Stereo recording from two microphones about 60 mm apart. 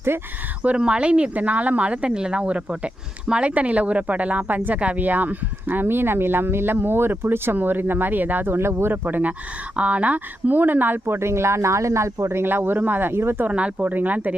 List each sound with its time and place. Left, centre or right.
0.8 s speech: centre; by 12.4 s right
12.4 s speech: right
13.5 s speech: right